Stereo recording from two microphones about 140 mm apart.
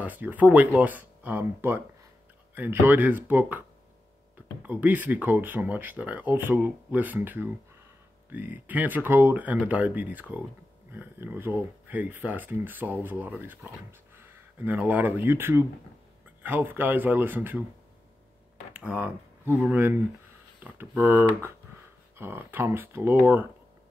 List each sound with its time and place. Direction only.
0.0 s speech: 10° right (ahead or behind)
4.6 s speech: 10° right (ahead or behind)
18.7 s speech: 10° right (ahead or behind)